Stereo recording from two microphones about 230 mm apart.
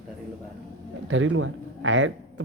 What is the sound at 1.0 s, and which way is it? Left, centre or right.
Speech, right.